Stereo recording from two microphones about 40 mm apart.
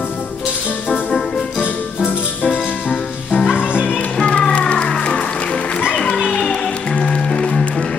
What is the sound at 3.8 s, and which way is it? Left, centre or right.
Music, left.